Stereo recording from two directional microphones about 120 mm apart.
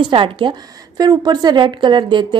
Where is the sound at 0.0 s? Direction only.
45° right (ahead or behind).